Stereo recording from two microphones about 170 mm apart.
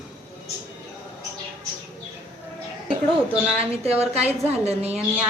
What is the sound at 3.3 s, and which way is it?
A woman's voice, 35° right (ahead or behind).